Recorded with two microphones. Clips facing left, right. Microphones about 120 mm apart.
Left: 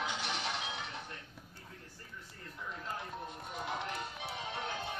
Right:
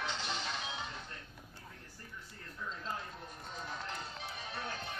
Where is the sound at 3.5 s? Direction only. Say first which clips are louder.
Left 4 dB; 70° left (ahead or behind).